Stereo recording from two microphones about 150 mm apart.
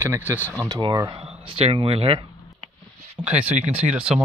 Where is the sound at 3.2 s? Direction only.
10° right (ahead or behind).